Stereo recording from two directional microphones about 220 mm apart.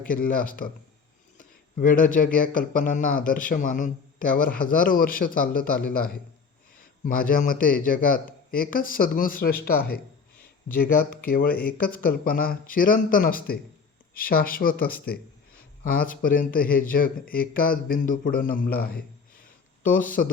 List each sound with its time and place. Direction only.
0.1 s speech: 40° left (ahead or behind)
7.0 s speech: 40° left (ahead or behind)